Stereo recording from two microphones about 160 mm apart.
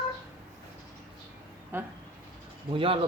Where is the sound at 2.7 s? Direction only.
35° right (ahead or behind).